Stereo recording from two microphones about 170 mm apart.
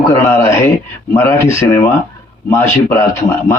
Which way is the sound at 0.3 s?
15° left (ahead or behind).